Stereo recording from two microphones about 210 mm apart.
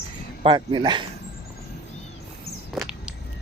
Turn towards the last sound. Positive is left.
turn(degrees=-5)  # may be behind; listen again after turning